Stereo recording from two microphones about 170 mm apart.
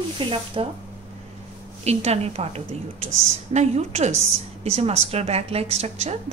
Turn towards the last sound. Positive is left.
turn(degrees=-40)  # may be behind; listen again after turning